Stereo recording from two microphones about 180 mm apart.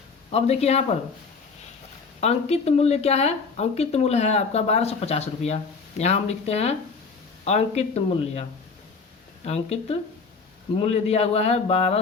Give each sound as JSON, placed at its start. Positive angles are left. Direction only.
{"t": 0.3, "sound": "speech", "side_deg": 35}
{"t": 2.2, "sound": "speech", "side_deg": 35}